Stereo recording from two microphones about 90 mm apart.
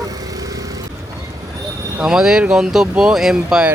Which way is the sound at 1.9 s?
5° right (ahead or behind).